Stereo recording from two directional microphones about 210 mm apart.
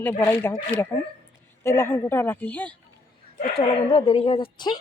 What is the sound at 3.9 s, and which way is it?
Speech, 30° left (ahead or behind).